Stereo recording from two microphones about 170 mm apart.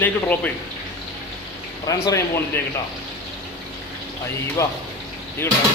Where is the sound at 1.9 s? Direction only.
20° left (ahead or behind).